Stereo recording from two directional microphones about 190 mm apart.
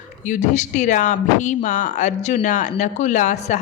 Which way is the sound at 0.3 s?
40° left (ahead or behind).